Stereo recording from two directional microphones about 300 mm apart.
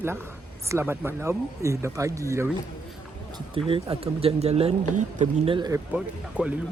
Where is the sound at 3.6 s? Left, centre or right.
Centre.